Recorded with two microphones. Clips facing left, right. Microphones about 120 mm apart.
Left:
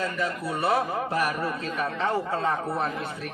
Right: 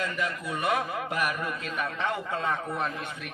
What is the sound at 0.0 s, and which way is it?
A man's voice, 35° left (ahead or behind).